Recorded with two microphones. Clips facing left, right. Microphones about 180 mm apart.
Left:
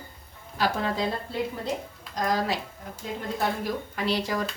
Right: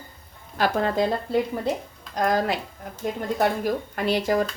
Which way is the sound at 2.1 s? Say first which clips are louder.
Right 4 dB; 55° right (ahead or behind).